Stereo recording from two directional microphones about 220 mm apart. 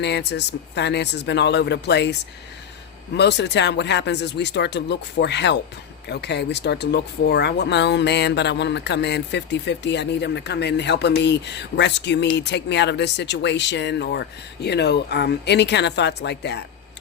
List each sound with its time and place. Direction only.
0.0 s speech: 50° left (ahead or behind)
3.2 s speech: 50° left (ahead or behind)